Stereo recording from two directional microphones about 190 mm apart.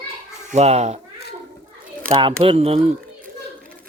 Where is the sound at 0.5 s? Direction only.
35° right (ahead or behind).